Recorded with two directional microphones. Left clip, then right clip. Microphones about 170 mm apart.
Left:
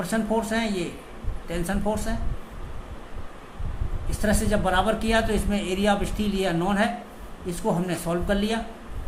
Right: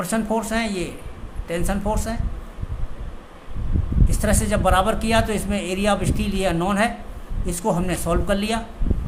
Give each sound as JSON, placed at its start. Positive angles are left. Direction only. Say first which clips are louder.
{"t": 0.0, "sound": "speech", "louder": "right 2 dB", "side_deg": -30}
{"t": 4.2, "sound": "speech", "louder": "right 3 dB", "side_deg": -35}